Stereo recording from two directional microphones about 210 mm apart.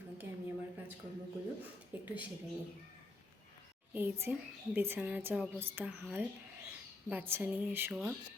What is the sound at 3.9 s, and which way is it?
A woman's voice, 10° right (ahead or behind).